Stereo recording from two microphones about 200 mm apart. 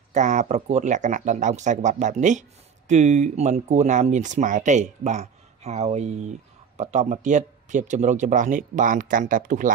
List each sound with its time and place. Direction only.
0.1 s speech: 35° right (ahead or behind)